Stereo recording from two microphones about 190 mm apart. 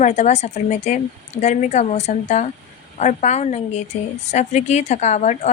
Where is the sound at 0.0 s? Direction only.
40° left (ahead or behind).